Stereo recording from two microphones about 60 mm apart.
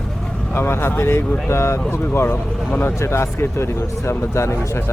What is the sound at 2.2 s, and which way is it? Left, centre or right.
Speech, left.